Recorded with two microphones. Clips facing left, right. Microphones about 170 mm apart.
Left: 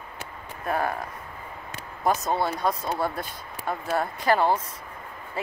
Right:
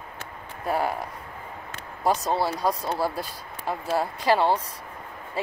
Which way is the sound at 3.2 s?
30° right (ahead or behind).